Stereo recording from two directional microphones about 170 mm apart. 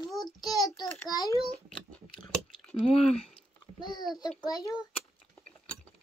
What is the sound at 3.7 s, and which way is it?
A child's voice, 25° left (ahead or behind).